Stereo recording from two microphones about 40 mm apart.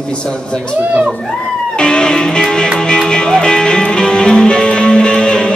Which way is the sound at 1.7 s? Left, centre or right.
Left.